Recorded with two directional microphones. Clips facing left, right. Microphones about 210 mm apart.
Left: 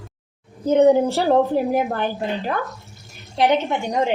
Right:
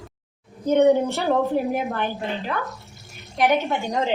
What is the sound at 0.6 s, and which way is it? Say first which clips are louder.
A woman's voice: left 2 dB; 30° left (ahead or behind).